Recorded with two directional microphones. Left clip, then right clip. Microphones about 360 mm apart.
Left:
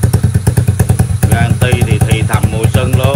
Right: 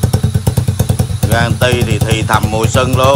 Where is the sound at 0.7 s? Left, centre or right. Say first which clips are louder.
Left 1 dB; centre.